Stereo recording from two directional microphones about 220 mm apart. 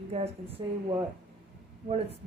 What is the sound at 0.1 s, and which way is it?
Speech, 25° right (ahead or behind).